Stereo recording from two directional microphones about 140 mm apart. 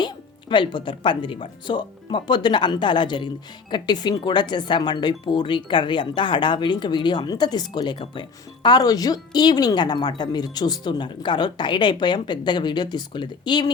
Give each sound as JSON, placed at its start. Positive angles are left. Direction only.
{"t": 0.0, "sound": "speech", "side_deg": 35}